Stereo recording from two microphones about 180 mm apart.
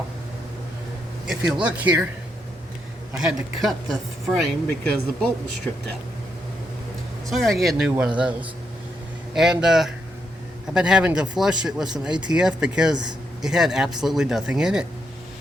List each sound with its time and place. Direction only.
1.3 s speech: 5° right (ahead or behind)
3.1 s speech: 5° right (ahead or behind)
7.3 s speech: centre (ahead or behind)